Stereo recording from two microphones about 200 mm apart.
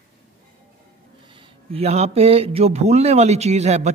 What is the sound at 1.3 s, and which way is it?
Speech, 30° right (ahead or behind).